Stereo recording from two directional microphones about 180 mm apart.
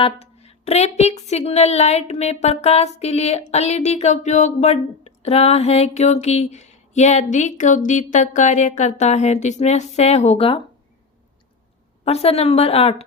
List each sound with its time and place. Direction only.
0.0 s a woman's voice: 35° left (ahead or behind)
12.0 s a woman's voice: 35° left (ahead or behind)